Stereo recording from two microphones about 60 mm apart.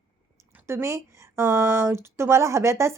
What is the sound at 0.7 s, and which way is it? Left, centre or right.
A woman's voice, right.